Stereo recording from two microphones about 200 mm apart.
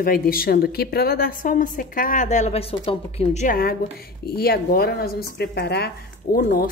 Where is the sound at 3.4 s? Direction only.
45° left (ahead or behind).